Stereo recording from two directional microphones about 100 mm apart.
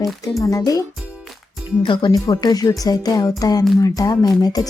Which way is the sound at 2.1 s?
45° left (ahead or behind).